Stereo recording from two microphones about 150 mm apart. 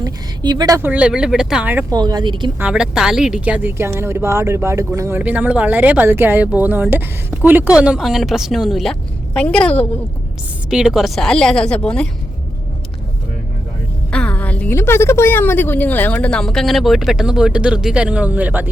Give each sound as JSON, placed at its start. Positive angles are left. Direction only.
{"t": 0.0, "sound": "a woman's voice", "side_deg": -25}
{"t": 0.8, "sound": "speech", "side_deg": -10}
{"t": 1.9, "sound": "speech", "side_deg": -25}
{"t": 2.6, "sound": "a woman's voice", "side_deg": -5}
{"t": 10.7, "sound": "a woman's voice", "side_deg": -5}
{"t": 14.1, "sound": "a woman's voice", "side_deg": 10}